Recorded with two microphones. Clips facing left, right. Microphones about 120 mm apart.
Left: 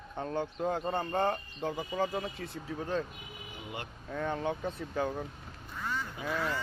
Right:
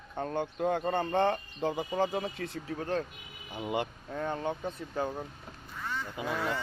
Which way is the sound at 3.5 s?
90° right.